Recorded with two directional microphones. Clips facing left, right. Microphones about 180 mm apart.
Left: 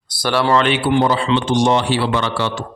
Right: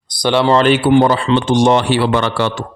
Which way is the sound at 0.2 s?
20° right (ahead or behind).